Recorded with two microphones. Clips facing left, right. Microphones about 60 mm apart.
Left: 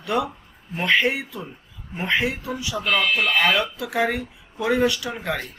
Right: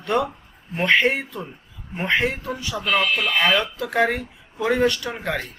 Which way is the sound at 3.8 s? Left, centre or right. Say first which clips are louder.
Right 2 dB; centre.